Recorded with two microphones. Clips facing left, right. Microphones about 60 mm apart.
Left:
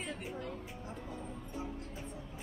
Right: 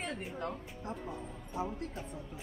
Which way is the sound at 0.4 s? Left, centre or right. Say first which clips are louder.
Right 3 dB; right.